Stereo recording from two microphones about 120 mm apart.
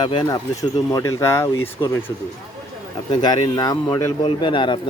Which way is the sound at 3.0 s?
35° left (ahead or behind).